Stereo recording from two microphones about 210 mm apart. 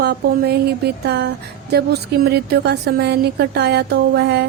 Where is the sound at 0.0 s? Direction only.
50° right (ahead or behind).